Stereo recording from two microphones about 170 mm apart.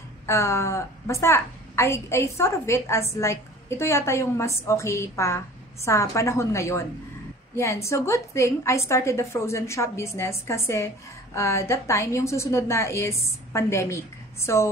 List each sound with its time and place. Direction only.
0.3 s a woman's voice: 15° left (ahead or behind)